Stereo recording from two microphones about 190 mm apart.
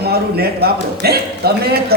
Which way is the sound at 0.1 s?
55° right (ahead or behind).